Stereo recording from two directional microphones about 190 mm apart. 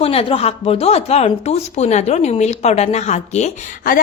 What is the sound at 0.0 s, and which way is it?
A woman's voice, 30° left (ahead or behind).